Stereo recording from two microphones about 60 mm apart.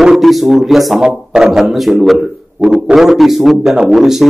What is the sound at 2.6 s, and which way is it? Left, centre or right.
A man's voice, centre.